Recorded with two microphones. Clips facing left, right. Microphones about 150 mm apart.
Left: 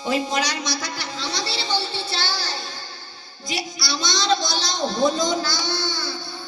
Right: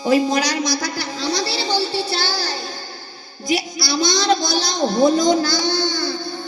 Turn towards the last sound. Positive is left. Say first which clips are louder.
# right 6 dB
turn(degrees=-15)  # may be behind; listen again after turning